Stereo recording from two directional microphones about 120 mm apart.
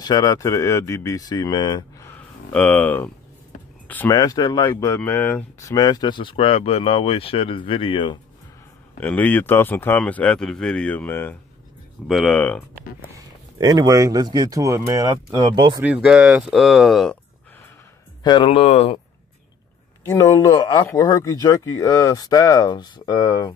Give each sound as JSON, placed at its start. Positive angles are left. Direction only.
{"t": 0.0, "sound": "speech", "side_deg": 35}
{"t": 2.0, "sound": "a sound", "side_deg": 10}
{"t": 3.8, "sound": "speech", "side_deg": 15}
{"t": 4.1, "sound": "speech", "side_deg": 30}
{"t": 4.8, "sound": "speech", "side_deg": 20}
{"t": 5.6, "sound": "speech", "side_deg": 30}
{"t": 9.0, "sound": "speech", "side_deg": 15}
{"t": 12.1, "sound": "speech", "side_deg": 0}
{"t": 13.1, "sound": "speech", "side_deg": -30}
{"t": 15.3, "sound": "speech", "side_deg": -35}
{"t": 15.8, "sound": "speech", "side_deg": -10}
{"t": 18.2, "sound": "speech", "side_deg": 40}
{"t": 18.5, "sound": "speech", "side_deg": 55}
{"t": 20.1, "sound": "speech", "side_deg": 30}